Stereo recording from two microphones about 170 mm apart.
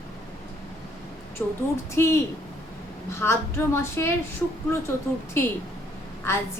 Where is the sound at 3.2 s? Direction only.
15° left (ahead or behind).